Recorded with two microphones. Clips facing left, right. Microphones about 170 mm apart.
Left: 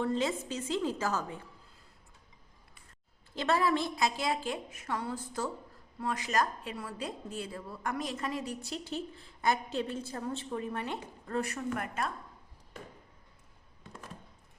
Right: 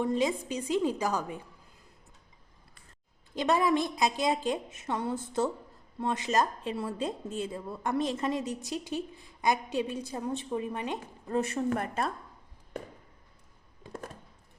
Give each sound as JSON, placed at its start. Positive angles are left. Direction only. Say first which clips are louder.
{"t": 0.0, "sound": "a woman's voice", "louder": "right 3 dB", "side_deg": -15}
{"t": 3.3, "sound": "a woman's voice", "louder": "right 3 dB", "side_deg": -15}